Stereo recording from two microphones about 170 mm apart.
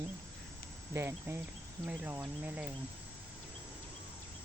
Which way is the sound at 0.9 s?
15° right (ahead or behind).